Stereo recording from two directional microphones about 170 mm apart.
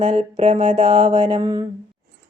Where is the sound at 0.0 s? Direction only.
45° right (ahead or behind).